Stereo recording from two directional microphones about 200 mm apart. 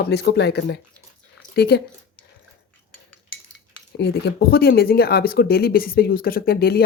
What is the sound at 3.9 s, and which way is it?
Speech, 55° left (ahead or behind).